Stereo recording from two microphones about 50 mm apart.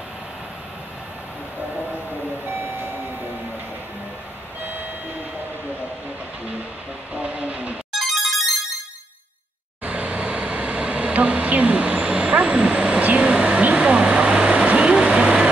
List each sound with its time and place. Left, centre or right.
2.5 s vehicle: right
7.2 s vehicle: right
8.0 s music: centre
9.8 s bee: right